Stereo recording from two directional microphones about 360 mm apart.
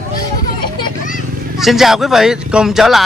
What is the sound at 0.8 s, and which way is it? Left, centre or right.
Vehicle, left.